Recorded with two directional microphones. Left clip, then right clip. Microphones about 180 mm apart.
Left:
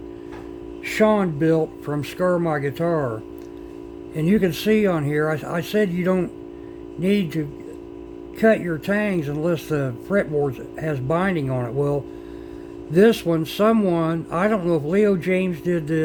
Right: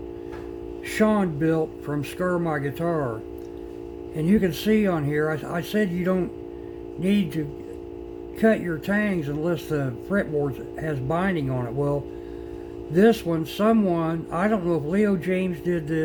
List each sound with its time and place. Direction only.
0.9 s speech: 50° left (ahead or behind)
4.2 s speech: 50° left (ahead or behind)